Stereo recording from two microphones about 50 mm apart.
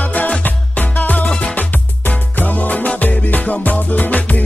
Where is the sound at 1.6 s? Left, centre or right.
Left.